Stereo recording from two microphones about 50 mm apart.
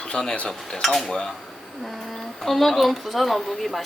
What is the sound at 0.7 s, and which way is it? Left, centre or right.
Speech, centre.